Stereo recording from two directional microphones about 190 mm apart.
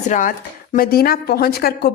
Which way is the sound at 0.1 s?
40° left (ahead or behind).